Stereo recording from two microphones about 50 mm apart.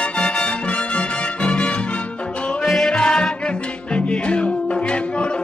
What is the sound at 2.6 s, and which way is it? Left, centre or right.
Music, centre.